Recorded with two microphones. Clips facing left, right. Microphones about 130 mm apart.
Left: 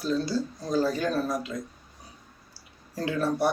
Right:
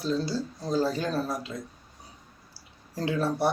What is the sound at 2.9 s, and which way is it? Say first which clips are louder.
Speech: even; 30° right (ahead or behind).